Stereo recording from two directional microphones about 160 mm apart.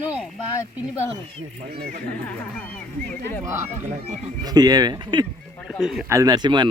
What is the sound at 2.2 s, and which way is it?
Speech, 10° left (ahead or behind).